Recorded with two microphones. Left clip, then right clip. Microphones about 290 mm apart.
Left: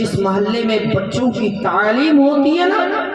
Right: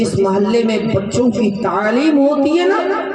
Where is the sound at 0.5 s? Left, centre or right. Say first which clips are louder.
Right 2 dB; right.